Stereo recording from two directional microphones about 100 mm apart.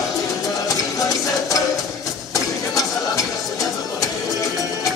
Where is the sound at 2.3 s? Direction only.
35° left (ahead or behind).